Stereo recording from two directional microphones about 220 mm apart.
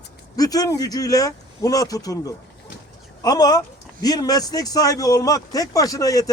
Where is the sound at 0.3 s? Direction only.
15° left (ahead or behind).